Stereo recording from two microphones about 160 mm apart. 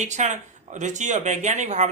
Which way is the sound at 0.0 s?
50° right (ahead or behind).